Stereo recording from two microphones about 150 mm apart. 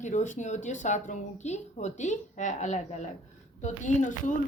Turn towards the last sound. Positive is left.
turn(degrees=55)  # may be behind; listen again after turning